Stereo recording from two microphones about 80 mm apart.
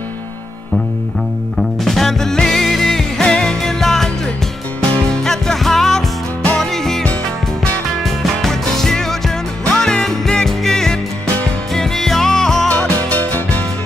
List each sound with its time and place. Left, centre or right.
1.9 s music: centre
5.1 s music: centre
12.6 s music: centre